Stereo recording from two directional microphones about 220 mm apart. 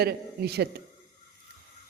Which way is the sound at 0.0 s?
45° right (ahead or behind).